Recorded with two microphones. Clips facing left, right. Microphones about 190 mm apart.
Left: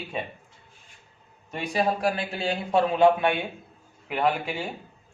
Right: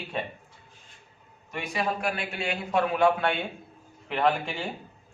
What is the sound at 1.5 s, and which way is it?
A man's voice, 30° left (ahead or behind).